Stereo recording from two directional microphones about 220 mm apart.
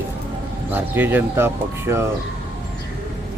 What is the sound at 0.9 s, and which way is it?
Speech, 10° right (ahead or behind).